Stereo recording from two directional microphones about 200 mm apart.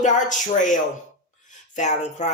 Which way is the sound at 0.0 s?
40° left (ahead or behind).